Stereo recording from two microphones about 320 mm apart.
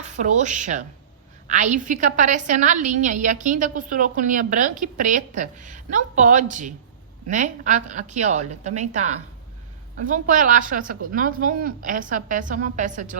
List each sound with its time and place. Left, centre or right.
0.0 s a woman's voice: right
10.1 s a woman's voice: right